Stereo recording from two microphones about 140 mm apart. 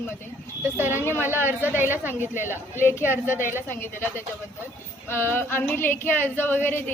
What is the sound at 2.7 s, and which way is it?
A woman's voice, 20° left (ahead or behind).